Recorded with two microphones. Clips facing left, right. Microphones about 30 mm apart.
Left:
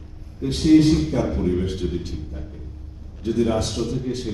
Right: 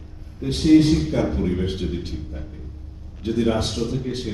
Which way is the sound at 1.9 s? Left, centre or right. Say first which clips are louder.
Even; centre.